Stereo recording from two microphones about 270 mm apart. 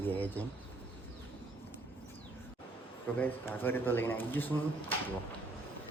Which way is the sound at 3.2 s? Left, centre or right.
Centre.